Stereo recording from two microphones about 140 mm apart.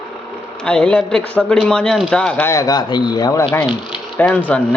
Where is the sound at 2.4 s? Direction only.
25° left (ahead or behind).